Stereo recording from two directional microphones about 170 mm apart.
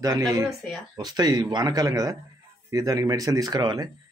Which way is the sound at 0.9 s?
25° right (ahead or behind).